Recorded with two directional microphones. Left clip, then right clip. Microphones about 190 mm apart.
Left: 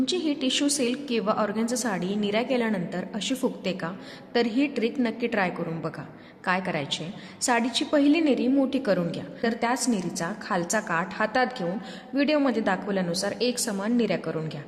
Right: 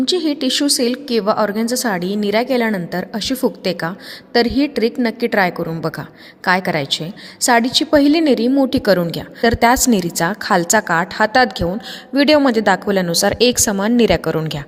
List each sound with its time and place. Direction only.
0.0 s a woman's voice: 40° right (ahead or behind)